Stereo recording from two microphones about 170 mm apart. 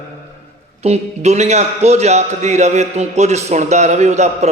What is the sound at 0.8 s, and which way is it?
A man's voice, 40° right (ahead or behind).